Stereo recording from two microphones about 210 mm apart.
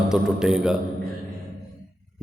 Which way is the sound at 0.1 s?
5° right (ahead or behind).